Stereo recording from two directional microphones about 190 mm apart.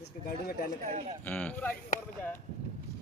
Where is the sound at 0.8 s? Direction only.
35° right (ahead or behind).